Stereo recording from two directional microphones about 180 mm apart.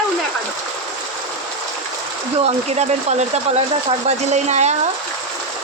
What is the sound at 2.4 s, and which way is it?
Speech, 40° right (ahead or behind).